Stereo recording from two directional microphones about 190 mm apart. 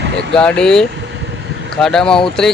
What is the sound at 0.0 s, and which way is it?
Vehicle, 65° right (ahead or behind).